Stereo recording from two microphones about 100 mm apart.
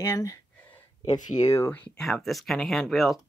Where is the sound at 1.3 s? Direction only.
45° left (ahead or behind).